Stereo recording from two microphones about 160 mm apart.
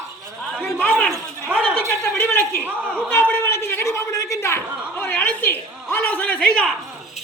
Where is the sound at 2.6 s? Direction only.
10° right (ahead or behind).